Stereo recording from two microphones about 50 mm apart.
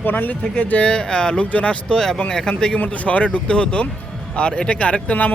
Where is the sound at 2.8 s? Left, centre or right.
Left.